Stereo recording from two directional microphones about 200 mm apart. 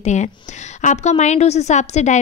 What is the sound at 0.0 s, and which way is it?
A woman's voice, 35° left (ahead or behind).